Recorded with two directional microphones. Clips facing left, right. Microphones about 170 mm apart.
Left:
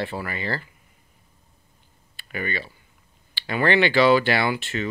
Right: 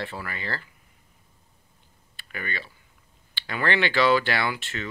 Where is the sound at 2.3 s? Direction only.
15° left (ahead or behind).